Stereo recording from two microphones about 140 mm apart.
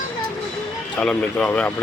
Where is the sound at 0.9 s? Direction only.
5° left (ahead or behind).